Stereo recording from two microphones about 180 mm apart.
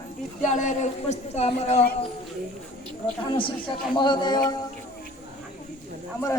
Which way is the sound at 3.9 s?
25° left (ahead or behind).